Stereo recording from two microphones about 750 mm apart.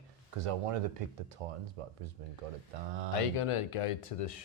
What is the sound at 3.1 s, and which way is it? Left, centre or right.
Speech, left.